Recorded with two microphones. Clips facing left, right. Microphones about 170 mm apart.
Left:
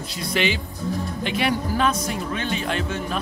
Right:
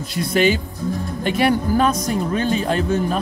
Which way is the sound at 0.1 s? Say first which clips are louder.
Right 7 dB; 45° right (ahead or behind).